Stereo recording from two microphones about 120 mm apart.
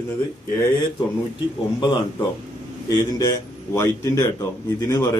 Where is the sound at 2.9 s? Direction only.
35° left (ahead or behind).